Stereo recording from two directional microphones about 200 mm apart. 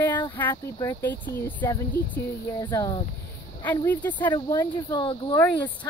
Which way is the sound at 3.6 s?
10° left (ahead or behind).